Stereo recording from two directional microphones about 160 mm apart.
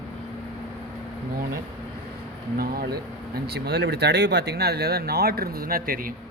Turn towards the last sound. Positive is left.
turn(degrees=-65)  # may be behind; listen again after turning